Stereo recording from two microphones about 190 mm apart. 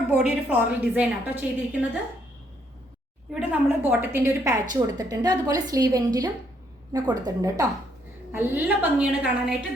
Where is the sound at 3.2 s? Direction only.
10° right (ahead or behind).